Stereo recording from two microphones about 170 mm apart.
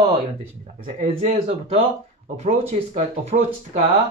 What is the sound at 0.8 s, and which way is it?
A man's voice, 40° right (ahead or behind).